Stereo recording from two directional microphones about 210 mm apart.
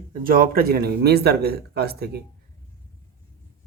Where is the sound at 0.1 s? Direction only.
40° right (ahead or behind).